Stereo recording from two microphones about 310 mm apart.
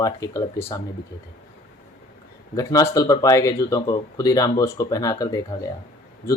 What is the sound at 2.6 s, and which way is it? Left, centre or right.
Speech, centre.